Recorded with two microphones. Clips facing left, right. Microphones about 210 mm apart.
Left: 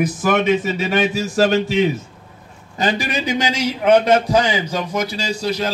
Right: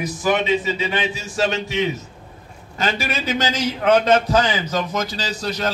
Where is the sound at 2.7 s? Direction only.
15° left (ahead or behind).